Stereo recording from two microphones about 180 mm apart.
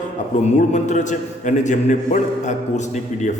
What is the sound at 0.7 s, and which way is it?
A man's voice, 40° left (ahead or behind).